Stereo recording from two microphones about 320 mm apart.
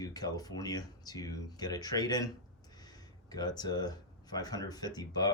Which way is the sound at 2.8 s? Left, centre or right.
Centre.